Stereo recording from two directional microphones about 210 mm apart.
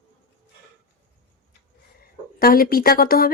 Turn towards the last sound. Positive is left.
turn(degrees=45)  # may be behind; listen again after turning